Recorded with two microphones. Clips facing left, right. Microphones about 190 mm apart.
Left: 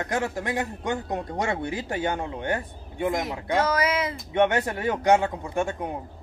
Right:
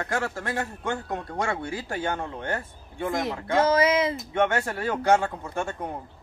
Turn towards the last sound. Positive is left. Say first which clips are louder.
# left 3 dB
turn(degrees=15)  # may be behind; listen again after turning